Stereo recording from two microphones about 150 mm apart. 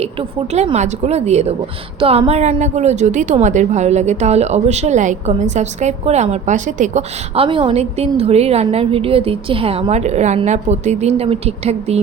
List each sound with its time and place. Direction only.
0.0 s a woman's voice: 45° right (ahead or behind)
7.3 s a woman's voice: 35° right (ahead or behind)